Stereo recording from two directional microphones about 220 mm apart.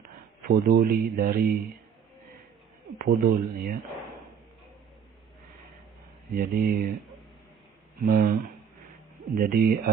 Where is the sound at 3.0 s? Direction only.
40° right (ahead or behind).